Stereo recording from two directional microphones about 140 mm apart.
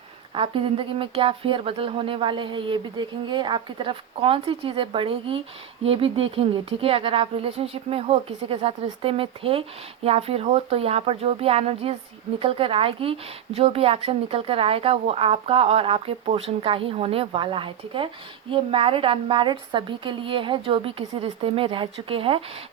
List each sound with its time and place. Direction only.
0.3 s speech: 40° right (ahead or behind)